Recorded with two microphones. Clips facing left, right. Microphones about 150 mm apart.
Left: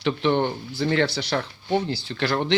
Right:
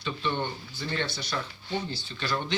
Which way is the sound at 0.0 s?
80° left.